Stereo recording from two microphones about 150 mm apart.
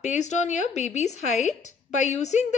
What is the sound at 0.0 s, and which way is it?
A woman's voice, 50° left (ahead or behind).